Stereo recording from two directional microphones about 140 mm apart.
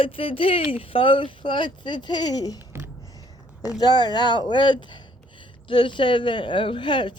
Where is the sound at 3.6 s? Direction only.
30° left (ahead or behind).